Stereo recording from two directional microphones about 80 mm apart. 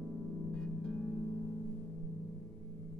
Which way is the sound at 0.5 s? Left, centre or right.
Centre.